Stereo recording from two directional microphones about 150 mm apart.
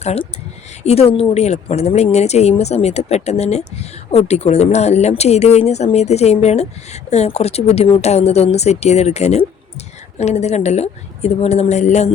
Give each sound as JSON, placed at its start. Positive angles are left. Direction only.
{"t": 0.0, "sound": "a woman's voice", "side_deg": 45}